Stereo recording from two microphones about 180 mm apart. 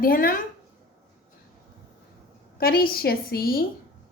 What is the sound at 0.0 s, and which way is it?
Speech, 50° left (ahead or behind).